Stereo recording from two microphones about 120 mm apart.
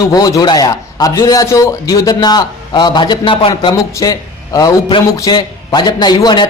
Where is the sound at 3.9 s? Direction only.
30° left (ahead or behind).